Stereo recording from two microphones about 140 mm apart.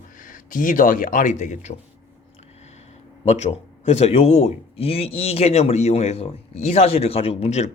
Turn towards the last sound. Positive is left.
turn(degrees=50)  # may be behind; listen again after turning